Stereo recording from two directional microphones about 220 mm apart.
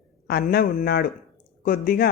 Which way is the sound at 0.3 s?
45° left (ahead or behind).